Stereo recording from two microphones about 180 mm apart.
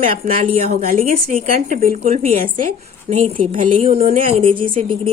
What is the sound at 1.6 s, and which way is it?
A woman's voice, 50° right (ahead or behind).